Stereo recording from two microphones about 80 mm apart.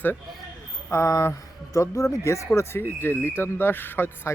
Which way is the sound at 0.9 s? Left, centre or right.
Left.